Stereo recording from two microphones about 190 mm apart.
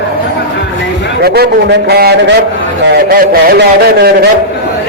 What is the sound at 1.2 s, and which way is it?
A man's voice, 55° right (ahead or behind).